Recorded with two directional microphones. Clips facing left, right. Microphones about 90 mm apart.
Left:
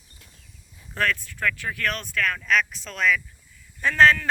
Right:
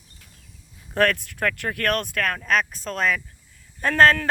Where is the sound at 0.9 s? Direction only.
60° right (ahead or behind).